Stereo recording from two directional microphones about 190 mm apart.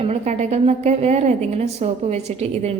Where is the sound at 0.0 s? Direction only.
35° right (ahead or behind).